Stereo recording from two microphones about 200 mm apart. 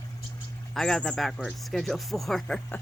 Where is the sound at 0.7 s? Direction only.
Centre (ahead or behind).